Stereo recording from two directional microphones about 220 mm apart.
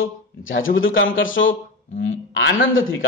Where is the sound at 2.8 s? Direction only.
65° left (ahead or behind).